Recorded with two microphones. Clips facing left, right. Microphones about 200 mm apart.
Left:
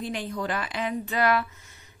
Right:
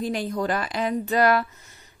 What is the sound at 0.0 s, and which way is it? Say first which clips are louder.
A woman's voice: right 5 dB; 40° right (ahead or behind).